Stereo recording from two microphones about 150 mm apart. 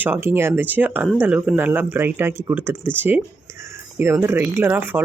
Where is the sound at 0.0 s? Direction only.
15° right (ahead or behind).